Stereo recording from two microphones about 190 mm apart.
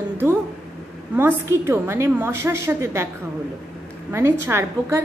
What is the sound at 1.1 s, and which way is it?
A woman's voice, 10° right (ahead or behind).